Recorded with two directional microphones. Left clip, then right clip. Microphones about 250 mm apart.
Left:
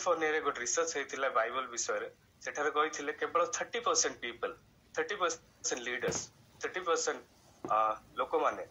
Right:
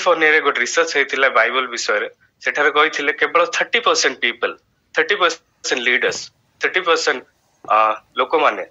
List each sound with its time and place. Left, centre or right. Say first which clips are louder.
0.1 s a man's voice: right 17 dB; right